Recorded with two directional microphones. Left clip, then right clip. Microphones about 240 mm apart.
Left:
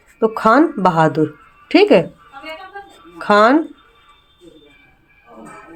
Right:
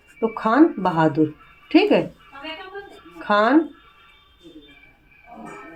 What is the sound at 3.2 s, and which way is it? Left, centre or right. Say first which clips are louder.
Speech: left 6 dB; left.